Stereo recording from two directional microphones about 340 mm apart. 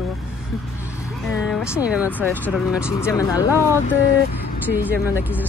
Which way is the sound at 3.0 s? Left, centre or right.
Centre.